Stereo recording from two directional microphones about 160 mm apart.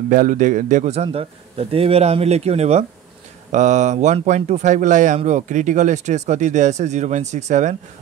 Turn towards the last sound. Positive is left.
turn(degrees=-45)  # may be behind; listen again after turning